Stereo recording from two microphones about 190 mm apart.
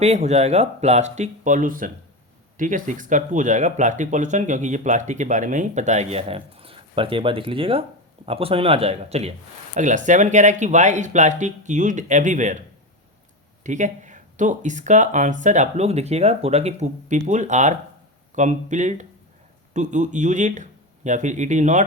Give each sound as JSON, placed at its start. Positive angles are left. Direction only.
{"t": 0.0, "sound": "speech", "side_deg": -35}
{"t": 13.7, "sound": "speech", "side_deg": -40}